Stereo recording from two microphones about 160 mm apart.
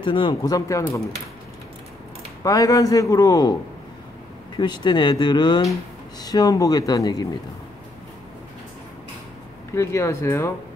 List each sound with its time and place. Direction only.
0.0 s speech: 30° left (ahead or behind)
2.4 s speech: 20° left (ahead or behind)
4.6 s speech: 30° left (ahead or behind)
9.8 s speech: 15° left (ahead or behind)